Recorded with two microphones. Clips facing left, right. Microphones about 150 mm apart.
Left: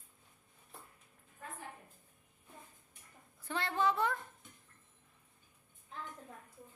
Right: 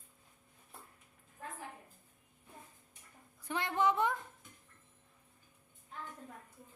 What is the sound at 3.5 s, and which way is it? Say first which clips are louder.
Speech: right 1 dB; 15° right (ahead or behind).